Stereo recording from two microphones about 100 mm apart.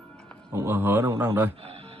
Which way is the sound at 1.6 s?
65° right (ahead or behind).